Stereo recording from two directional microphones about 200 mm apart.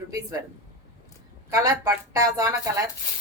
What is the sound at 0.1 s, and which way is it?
Speech, 15° right (ahead or behind).